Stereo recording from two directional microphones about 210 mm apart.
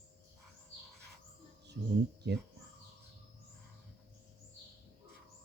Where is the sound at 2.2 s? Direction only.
55° right (ahead or behind).